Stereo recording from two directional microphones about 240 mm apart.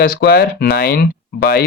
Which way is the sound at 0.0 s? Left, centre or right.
Left.